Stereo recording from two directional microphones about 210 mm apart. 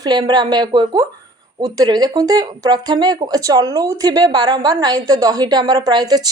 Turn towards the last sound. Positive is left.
turn(degrees=-20)  # may be behind; listen again after turning